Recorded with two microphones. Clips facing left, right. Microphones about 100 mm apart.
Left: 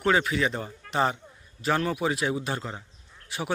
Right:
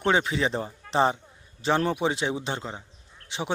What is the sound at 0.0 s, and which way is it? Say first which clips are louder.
Speech: even; 25° right (ahead or behind).